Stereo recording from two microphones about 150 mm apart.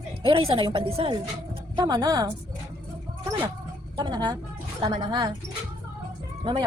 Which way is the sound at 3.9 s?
30° right (ahead or behind).